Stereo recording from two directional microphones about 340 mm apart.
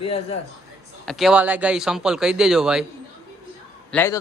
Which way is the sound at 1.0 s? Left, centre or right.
Centre.